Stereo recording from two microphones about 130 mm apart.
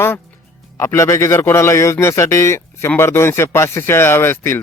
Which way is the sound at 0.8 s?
25° left (ahead or behind).